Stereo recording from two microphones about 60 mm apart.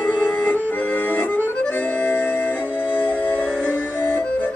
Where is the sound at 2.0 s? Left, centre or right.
Left.